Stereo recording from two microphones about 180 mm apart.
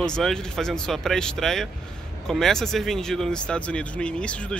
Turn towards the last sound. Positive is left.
turn(degrees=5)  # may be behind; listen again after turning